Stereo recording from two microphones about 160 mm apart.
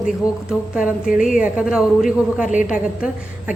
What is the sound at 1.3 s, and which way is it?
A man's voice, 5° right (ahead or behind).